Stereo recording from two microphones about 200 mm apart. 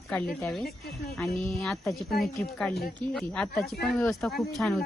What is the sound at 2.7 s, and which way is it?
Speech, 50° left (ahead or behind).